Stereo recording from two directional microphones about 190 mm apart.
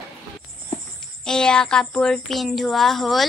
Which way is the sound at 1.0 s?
5° left (ahead or behind).